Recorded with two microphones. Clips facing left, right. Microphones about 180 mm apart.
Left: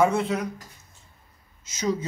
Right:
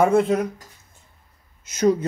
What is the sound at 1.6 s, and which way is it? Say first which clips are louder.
Speech: right 9 dB; 60° right (ahead or behind).